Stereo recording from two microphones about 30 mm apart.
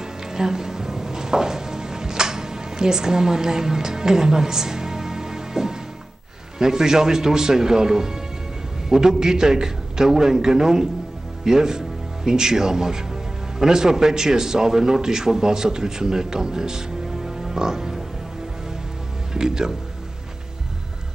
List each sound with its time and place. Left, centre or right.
0.0 s music: right
6.6 s a man's voice: centre
19.3 s speech: right